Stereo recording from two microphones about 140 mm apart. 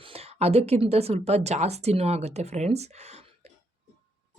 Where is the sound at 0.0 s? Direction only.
45° right (ahead or behind).